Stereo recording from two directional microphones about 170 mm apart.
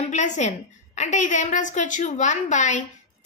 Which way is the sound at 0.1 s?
45° left (ahead or behind).